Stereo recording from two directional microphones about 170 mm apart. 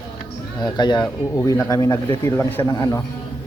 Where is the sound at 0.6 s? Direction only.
25° left (ahead or behind).